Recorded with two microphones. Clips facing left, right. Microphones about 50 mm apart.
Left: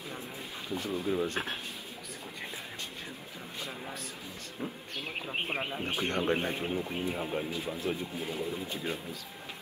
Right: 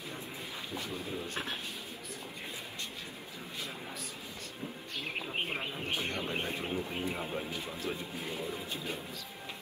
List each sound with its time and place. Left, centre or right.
0.7 s speech: left
5.3 s speech: left
5.7 s speech: left
6.6 s speech: centre
7.9 s speech: left